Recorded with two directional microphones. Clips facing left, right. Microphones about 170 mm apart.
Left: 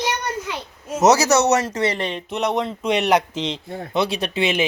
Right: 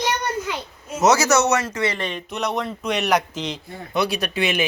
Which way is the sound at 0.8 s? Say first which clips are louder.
Left 2 dB; 40° left (ahead or behind).